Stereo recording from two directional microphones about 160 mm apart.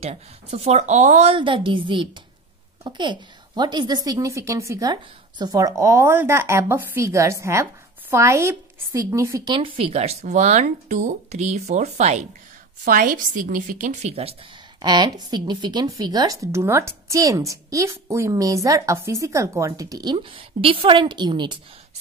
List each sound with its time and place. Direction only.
0.0 s a woman's voice: 40° right (ahead or behind)
12.8 s a woman's voice: 60° right (ahead or behind)
14.8 s speech: 25° right (ahead or behind)